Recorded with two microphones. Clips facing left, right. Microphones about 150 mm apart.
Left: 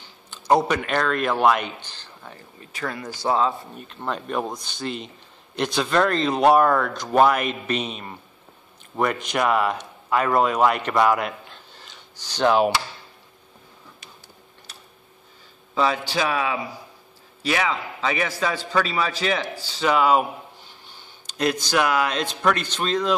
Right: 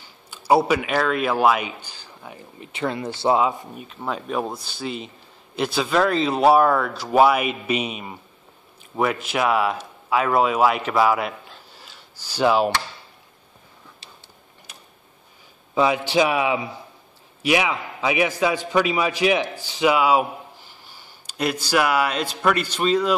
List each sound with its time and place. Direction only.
0.3 s a man's voice: 10° right (ahead or behind)
15.7 s a man's voice: 15° right (ahead or behind)